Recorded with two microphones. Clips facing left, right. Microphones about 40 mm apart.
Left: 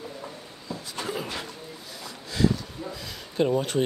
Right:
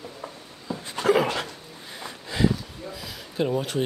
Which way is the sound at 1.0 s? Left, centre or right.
Right.